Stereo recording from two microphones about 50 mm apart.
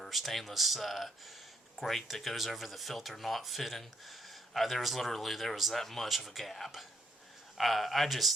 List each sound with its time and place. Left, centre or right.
0.0 s speech: centre